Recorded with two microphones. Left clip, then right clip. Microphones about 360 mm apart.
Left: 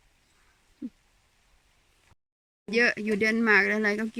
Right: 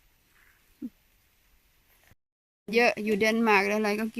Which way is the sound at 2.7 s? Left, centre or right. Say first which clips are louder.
Right 1 dB; centre.